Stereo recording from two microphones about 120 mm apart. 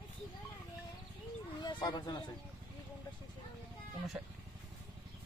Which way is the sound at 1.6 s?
35° left (ahead or behind).